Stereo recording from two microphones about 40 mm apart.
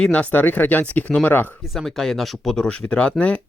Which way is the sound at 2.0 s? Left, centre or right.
Centre.